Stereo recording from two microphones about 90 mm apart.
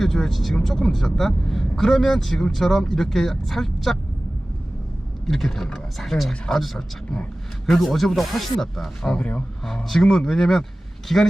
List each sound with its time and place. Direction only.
0.0 s speech: 5° left (ahead or behind)
5.2 s speech: 5° left (ahead or behind)
9.1 s speech: 15° left (ahead or behind)
9.6 s speech: 5° left (ahead or behind)